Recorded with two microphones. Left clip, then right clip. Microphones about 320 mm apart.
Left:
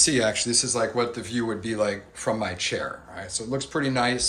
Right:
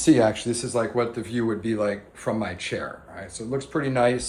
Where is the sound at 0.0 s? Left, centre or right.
Centre.